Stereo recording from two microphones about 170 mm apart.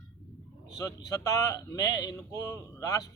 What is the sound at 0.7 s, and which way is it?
Speech, 20° left (ahead or behind).